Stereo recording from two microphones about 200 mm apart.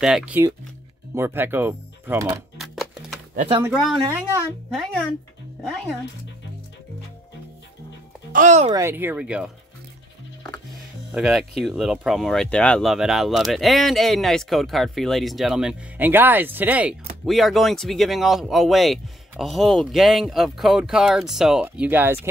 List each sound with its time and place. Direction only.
0.0 s speech: 5° right (ahead or behind)
2.5 s music: centre (ahead or behind)
3.3 s speech: 25° right (ahead or behind)
4.6 s speech: centre (ahead or behind)
8.3 s speech: 40° right (ahead or behind)
8.7 s speech: 10° right (ahead or behind)
11.1 s speech: centre (ahead or behind)